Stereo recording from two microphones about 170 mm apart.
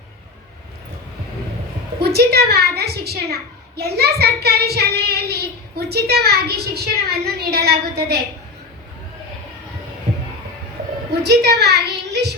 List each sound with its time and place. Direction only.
2.0 s a woman's voice: 70° right (ahead or behind)
11.2 s a woman's voice: 75° right (ahead or behind)